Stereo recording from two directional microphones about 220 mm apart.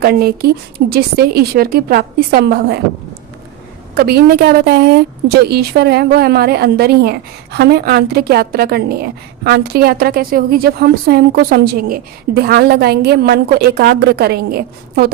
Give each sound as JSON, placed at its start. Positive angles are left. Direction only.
{"t": 0.0, "sound": "a woman's voice", "side_deg": -45}
{"t": 3.9, "sound": "a woman's voice", "side_deg": -45}